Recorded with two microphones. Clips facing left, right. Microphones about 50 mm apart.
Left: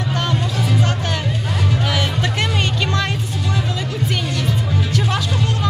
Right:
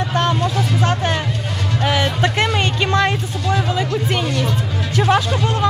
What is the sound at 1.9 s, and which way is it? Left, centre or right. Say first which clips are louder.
Music: right 3 dB; right.